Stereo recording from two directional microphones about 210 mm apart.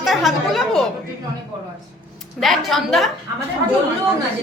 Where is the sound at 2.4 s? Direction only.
Centre (ahead or behind).